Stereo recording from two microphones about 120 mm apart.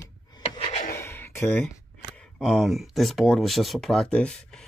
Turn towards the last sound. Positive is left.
turn(degrees=5)  # may be behind; listen again after turning